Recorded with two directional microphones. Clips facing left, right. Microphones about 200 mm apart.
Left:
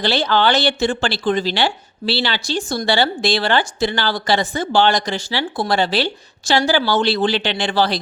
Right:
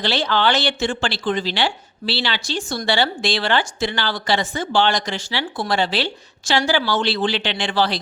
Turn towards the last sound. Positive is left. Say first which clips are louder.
# left 2 dB
turn(degrees=40)  # may be behind; listen again after turning